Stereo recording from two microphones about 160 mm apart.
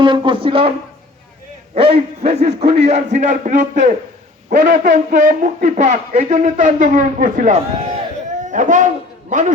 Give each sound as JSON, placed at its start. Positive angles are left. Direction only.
{"t": 0.0, "sound": "speech", "side_deg": -30}
{"t": 1.7, "sound": "a man's voice", "side_deg": -35}